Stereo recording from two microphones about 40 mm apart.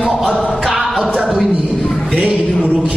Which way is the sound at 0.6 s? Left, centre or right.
Centre.